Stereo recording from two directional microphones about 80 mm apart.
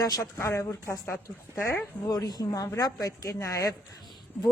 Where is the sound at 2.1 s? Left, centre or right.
Left.